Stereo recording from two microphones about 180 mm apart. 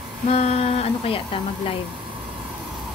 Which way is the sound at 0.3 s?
35° left (ahead or behind).